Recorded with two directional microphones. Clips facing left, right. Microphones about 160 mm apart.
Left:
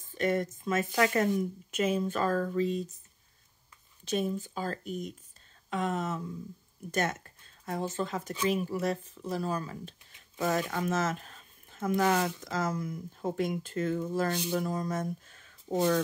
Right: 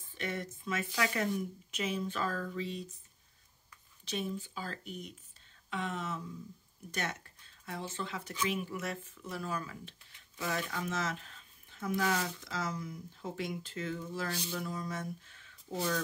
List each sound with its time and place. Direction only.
0.1 s speech: 45° left (ahead or behind)
4.0 s speech: 45° left (ahead or behind)
15.7 s speech: 25° left (ahead or behind)